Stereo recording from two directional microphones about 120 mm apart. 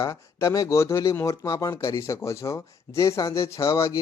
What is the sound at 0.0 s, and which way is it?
Speech, 25° left (ahead or behind).